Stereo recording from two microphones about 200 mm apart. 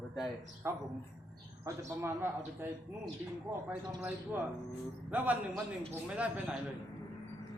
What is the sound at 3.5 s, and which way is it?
Speech, 10° right (ahead or behind).